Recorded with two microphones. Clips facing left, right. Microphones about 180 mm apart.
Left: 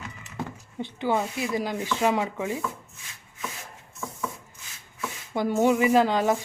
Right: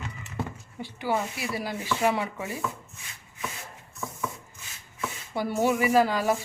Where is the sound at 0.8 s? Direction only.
20° left (ahead or behind).